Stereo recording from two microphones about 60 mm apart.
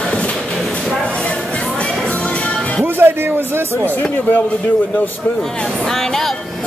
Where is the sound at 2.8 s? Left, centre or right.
Right.